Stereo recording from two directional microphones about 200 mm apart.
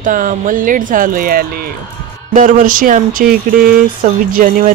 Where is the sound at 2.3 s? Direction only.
40° right (ahead or behind).